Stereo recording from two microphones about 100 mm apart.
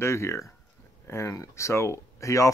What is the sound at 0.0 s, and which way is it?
Speech, 30° left (ahead or behind).